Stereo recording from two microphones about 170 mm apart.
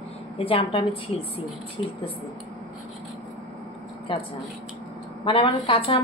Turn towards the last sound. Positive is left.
turn(degrees=30)  # may be behind; listen again after turning